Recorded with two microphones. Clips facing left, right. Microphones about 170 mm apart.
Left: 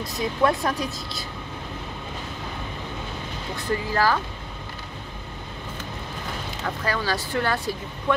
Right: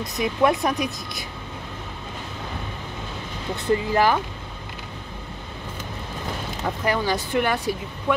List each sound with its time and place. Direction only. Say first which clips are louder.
0.2 s speech: right 2 dB; 15° right (ahead or behind)
3.5 s speech: right 4 dB; 20° right (ahead or behind)
6.6 s speech: right 4 dB; 20° right (ahead or behind)